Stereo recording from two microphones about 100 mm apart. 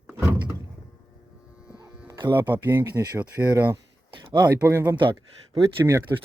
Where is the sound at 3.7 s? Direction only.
45° right (ahead or behind).